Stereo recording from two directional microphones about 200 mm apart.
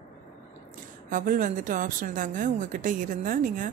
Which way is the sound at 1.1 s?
40° right (ahead or behind).